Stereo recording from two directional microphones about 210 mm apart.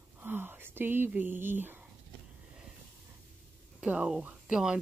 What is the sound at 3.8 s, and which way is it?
Speech, 5° right (ahead or behind).